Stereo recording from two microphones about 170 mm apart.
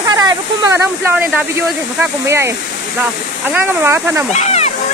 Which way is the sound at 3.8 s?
15° right (ahead or behind).